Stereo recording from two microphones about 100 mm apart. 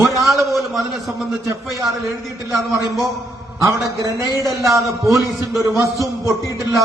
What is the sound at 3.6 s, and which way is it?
Speech, 35° right (ahead or behind).